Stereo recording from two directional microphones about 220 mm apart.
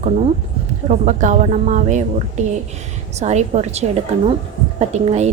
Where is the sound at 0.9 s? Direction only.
35° right (ahead or behind).